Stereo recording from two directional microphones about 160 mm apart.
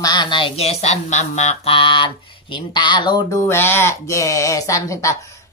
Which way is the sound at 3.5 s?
15° left (ahead or behind).